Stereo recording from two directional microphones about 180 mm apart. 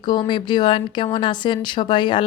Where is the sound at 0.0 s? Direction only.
25° left (ahead or behind).